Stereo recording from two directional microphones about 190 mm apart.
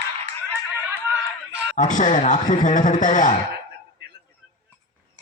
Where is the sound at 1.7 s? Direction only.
40° left (ahead or behind).